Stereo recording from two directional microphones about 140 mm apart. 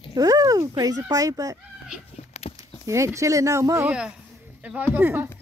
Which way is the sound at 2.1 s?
45° left (ahead or behind).